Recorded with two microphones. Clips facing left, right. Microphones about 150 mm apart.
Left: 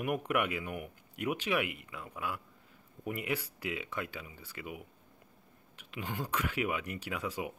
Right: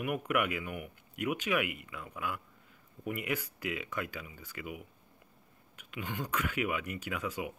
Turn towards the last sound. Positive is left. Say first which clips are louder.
# even
turn(degrees=35)  # may be behind; listen again after turning